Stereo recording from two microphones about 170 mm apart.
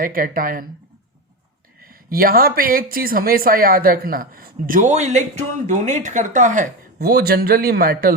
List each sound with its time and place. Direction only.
0.0 s speech: 55° right (ahead or behind)
1.8 s speech: 60° right (ahead or behind)